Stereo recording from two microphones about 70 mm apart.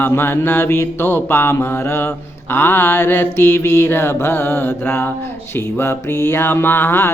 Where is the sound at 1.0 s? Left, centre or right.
Left.